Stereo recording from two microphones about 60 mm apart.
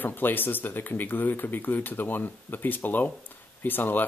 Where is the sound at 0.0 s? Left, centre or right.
Left.